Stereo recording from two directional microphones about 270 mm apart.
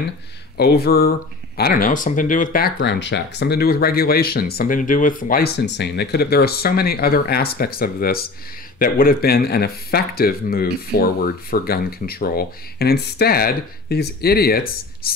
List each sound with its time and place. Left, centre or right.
0.6 s speech: left